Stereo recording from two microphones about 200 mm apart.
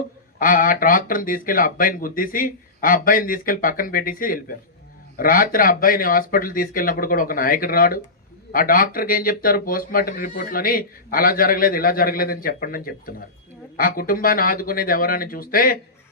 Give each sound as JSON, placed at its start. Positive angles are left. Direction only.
{"t": 0.3, "sound": "speech", "side_deg": 45}